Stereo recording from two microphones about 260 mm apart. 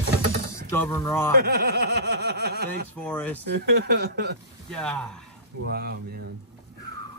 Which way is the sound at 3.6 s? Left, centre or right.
Right.